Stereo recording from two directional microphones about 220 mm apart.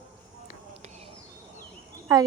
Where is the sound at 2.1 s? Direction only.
15° right (ahead or behind).